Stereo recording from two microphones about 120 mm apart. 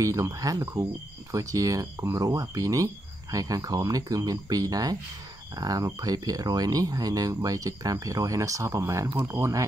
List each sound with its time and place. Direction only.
0.0 s speech: 25° right (ahead or behind)